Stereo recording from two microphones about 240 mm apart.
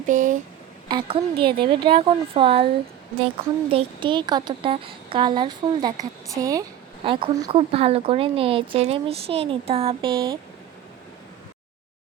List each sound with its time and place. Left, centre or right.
0.0 s speech: right
0.9 s a woman's voice: centre
3.7 s a woman's voice: right